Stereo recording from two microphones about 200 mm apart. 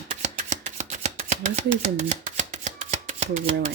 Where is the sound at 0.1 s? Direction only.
35° right (ahead or behind).